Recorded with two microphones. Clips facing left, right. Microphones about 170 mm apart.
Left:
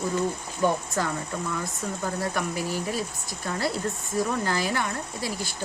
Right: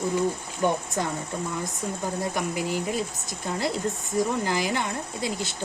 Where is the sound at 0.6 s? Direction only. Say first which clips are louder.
Even; 20° right (ahead or behind).